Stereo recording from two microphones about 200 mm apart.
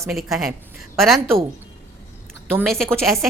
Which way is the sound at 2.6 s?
Centre (ahead or behind).